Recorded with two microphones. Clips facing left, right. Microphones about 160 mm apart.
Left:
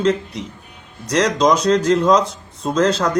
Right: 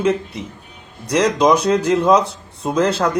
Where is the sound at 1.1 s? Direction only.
5° right (ahead or behind).